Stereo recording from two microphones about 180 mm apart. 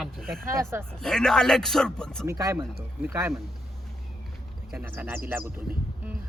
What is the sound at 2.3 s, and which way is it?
Speech, 20° right (ahead or behind).